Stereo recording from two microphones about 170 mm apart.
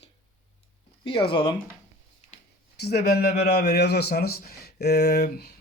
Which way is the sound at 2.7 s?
70° left (ahead or behind).